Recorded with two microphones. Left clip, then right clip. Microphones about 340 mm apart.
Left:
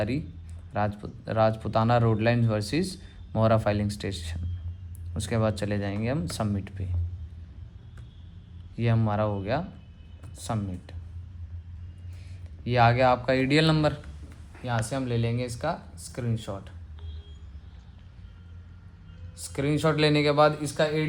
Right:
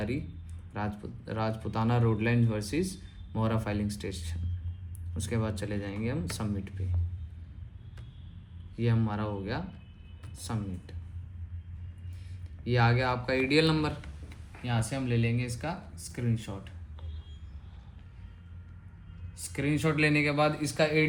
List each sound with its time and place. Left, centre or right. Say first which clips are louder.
0.7 s speech: left 8 dB; left
8.8 s speech: left 6 dB; left
12.7 s speech: left 7 dB; left
19.5 s speech: left 4 dB; left